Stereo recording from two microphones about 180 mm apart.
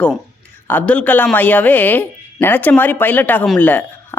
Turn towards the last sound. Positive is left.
turn(degrees=10)  # may be behind; listen again after turning